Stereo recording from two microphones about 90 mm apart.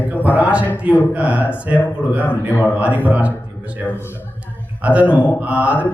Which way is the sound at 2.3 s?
20° left (ahead or behind).